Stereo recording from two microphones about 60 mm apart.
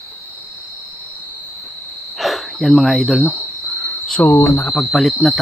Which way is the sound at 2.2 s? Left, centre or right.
Centre.